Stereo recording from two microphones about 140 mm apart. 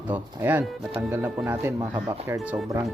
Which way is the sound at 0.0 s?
10° right (ahead or behind).